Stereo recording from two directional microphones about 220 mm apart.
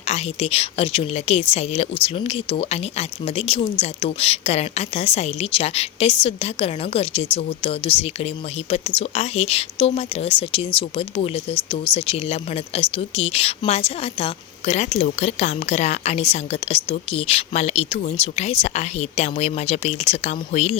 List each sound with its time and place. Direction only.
0.1 s speech: 25° left (ahead or behind)